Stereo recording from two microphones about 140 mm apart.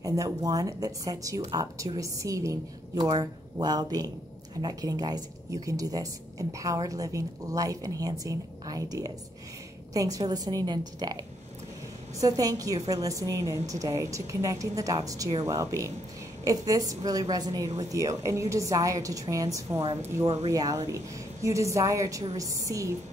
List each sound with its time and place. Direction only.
0.0 s speech: 25° right (ahead or behind)